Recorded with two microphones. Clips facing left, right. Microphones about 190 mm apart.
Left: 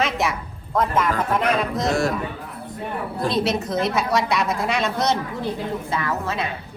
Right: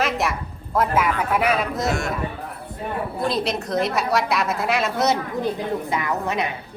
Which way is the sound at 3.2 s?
Centre (ahead or behind).